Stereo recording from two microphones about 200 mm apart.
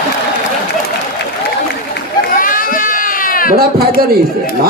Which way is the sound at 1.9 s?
45° left (ahead or behind).